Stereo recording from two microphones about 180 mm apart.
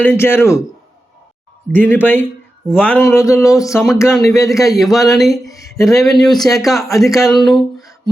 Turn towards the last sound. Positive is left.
turn(degrees=0)  # may be behind; listen again after turning